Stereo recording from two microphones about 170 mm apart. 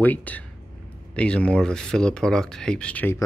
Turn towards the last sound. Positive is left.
turn(degrees=10)  # may be behind; listen again after turning